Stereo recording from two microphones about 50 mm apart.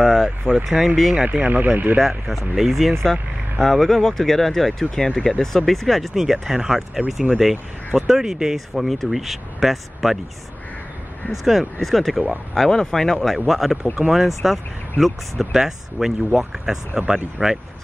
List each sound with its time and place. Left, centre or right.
0.0 s vehicle: centre
0.7 s speech: centre
1.1 s speech: right
2.0 s speech: centre
3.6 s speech: centre
8.5 s speech: centre
11.4 s speech: centre
12.5 s speech: centre
13.5 s speech: centre
13.9 s speech: centre
14.2 s speech: centre